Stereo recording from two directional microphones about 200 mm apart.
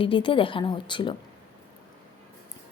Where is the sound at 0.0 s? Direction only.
25° left (ahead or behind).